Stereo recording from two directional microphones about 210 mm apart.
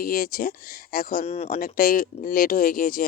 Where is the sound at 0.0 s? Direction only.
45° left (ahead or behind).